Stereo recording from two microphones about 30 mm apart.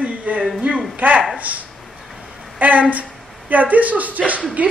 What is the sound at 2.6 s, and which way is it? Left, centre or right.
Speech, right.